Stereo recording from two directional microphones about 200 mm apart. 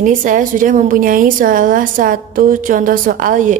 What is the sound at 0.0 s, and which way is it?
A woman's voice, 40° right (ahead or behind).